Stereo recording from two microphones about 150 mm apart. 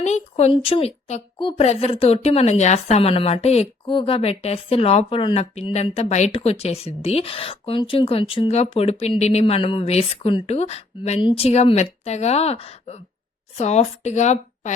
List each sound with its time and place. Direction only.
0.0 s a woman's voice: 45° left (ahead or behind)